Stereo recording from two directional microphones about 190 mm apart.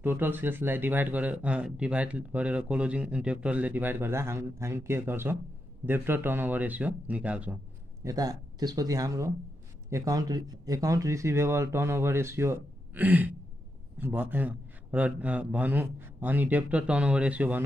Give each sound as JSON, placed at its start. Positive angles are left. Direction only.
{"t": 0.0, "sound": "speech", "side_deg": -10}
{"t": 8.0, "sound": "speech", "side_deg": -20}